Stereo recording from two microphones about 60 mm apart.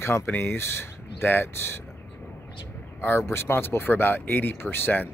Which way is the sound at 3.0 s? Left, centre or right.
Left.